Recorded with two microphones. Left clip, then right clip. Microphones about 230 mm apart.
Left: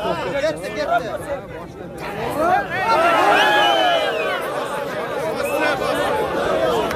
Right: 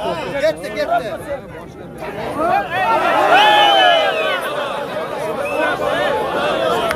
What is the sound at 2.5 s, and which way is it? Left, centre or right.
Speech, right.